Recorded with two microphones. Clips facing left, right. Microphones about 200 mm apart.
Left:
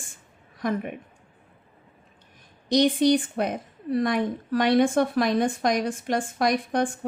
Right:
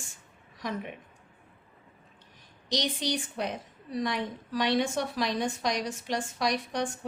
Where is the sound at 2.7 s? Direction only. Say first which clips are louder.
Left 12 dB; 55° left (ahead or behind).